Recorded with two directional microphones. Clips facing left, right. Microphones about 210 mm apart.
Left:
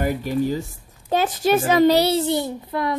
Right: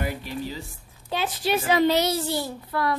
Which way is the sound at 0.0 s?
45° left (ahead or behind).